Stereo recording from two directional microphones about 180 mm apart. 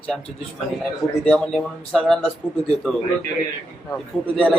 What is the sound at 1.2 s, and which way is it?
Speech, 5° left (ahead or behind).